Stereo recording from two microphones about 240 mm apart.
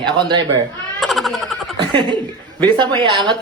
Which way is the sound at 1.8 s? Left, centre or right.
Centre.